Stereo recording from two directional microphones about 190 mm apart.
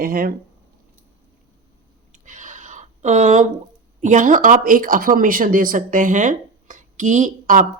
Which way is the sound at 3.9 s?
40° right (ahead or behind).